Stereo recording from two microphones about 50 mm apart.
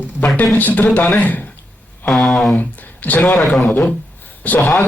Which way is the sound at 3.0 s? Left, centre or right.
Left.